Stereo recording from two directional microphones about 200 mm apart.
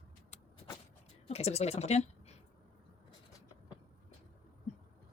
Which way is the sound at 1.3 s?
30° left (ahead or behind).